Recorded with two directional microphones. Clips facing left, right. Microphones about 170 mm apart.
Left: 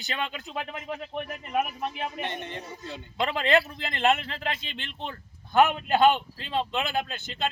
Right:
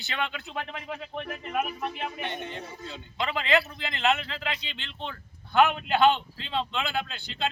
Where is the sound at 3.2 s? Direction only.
50° left (ahead or behind).